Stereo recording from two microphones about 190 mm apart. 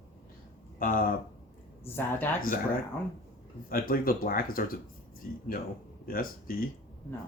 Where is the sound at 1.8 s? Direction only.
10° left (ahead or behind).